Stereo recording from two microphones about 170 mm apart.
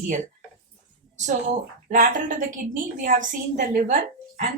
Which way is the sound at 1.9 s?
50° right (ahead or behind).